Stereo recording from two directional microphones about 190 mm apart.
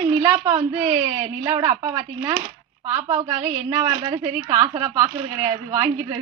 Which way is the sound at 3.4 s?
15° right (ahead or behind).